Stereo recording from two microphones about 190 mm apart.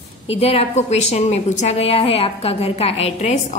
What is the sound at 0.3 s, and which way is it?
A woman's voice, 30° left (ahead or behind).